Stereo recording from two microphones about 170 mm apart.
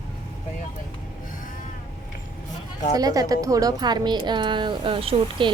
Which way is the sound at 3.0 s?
20° right (ahead or behind).